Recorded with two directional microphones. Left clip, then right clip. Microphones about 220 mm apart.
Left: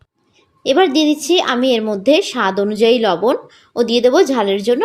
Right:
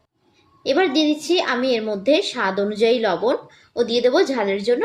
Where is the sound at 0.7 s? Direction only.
35° left (ahead or behind).